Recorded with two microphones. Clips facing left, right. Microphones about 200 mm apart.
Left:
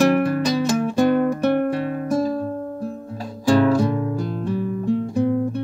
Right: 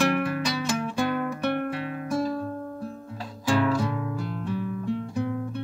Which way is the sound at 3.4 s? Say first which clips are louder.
Left 8 dB; 40° left (ahead or behind).